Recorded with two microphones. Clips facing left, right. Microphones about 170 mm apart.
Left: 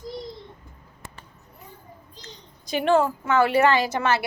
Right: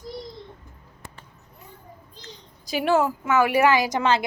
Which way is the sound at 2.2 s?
5° right (ahead or behind).